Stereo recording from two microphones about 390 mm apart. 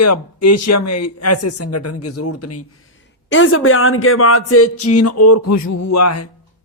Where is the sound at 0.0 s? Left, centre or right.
Left.